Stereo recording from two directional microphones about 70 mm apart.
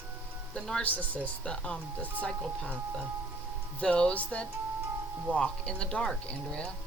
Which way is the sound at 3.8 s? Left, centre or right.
Centre.